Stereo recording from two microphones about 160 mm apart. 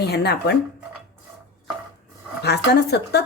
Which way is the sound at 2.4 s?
90° left.